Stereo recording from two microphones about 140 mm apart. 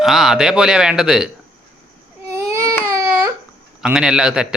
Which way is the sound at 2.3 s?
20° right (ahead or behind).